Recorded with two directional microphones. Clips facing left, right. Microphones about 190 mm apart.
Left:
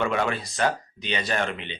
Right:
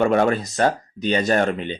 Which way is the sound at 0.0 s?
45° right (ahead or behind).